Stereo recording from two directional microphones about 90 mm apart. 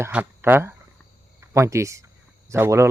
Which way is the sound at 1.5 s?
35° right (ahead or behind).